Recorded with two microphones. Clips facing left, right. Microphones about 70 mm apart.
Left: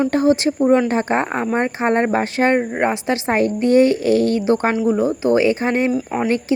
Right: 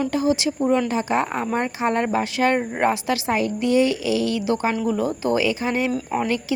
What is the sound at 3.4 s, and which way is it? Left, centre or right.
Speech, left.